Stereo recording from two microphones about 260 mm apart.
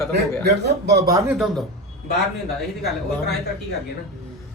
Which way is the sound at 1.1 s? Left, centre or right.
Centre.